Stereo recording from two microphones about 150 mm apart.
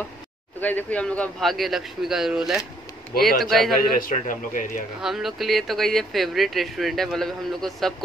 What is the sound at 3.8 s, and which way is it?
A man's voice, 70° left (ahead or behind).